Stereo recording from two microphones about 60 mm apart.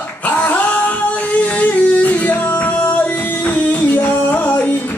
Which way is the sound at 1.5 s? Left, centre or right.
Left.